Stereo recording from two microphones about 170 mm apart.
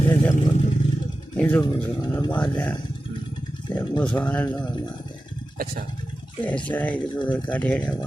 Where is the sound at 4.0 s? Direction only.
5° left (ahead or behind).